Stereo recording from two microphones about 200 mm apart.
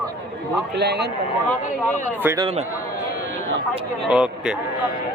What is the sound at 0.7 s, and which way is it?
Speech, 55° right (ahead or behind).